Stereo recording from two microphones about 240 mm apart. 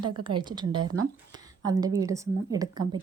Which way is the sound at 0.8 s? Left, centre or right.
Right.